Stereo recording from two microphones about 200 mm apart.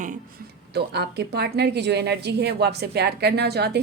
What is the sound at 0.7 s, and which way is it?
A woman's voice, 55° right (ahead or behind).